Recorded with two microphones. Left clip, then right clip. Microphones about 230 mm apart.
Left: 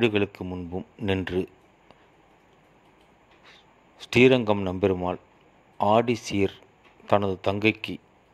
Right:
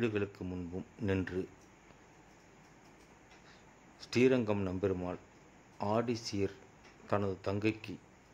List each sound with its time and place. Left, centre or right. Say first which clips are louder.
0.0 s speech: left 11 dB; centre
4.1 s a man's voice: left 11 dB; centre